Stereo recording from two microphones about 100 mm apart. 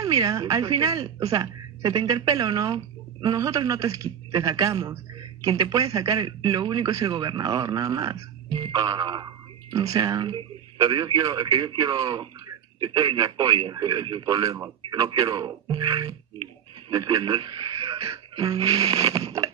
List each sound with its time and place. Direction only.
0.0 s a woman's voice: 40° right (ahead or behind)